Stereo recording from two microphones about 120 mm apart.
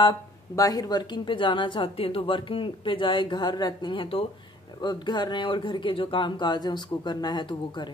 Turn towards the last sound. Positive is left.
turn(degrees=40)  # may be behind; listen again after turning